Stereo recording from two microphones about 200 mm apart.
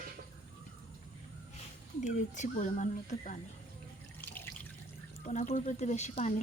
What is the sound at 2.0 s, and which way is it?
Speech, 35° left (ahead or behind).